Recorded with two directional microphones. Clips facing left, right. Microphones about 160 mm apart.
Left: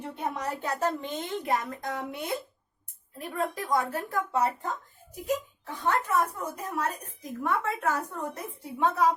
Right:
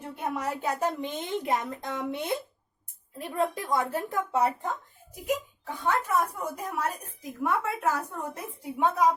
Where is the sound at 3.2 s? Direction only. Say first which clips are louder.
Right 3 dB; 25° right (ahead or behind).